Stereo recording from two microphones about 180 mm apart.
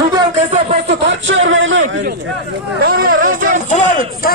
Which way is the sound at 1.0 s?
90° right.